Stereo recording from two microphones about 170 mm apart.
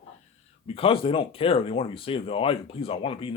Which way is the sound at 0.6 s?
35° left (ahead or behind).